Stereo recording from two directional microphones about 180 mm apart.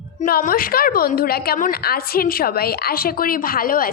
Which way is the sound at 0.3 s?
50° left (ahead or behind).